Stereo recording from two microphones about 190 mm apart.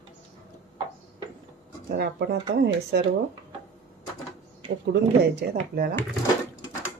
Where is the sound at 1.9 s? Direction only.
60° right (ahead or behind).